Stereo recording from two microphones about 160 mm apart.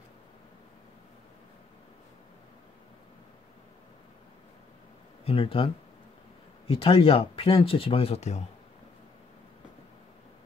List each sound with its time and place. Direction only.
5.2 s speech: 35° left (ahead or behind)
6.7 s speech: 35° left (ahead or behind)